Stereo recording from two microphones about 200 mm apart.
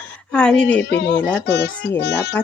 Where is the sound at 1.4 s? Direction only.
55° left (ahead or behind).